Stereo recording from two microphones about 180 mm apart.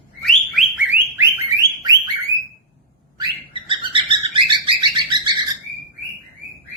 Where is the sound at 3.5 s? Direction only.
30° right (ahead or behind).